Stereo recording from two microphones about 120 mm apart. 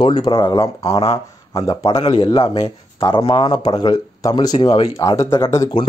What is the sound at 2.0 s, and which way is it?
Speech, 50° left (ahead or behind).